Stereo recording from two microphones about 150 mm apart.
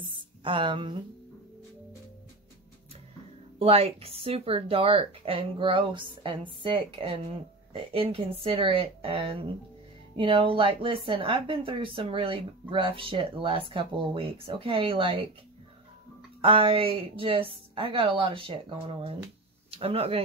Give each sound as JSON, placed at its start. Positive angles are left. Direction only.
{"t": 0.1, "sound": "a sound", "side_deg": -35}
{"t": 3.5, "sound": "speech", "side_deg": -40}
{"t": 16.3, "sound": "speech", "side_deg": -35}